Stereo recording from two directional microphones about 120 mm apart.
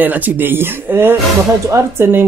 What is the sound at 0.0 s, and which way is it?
Speech, 15° right (ahead or behind).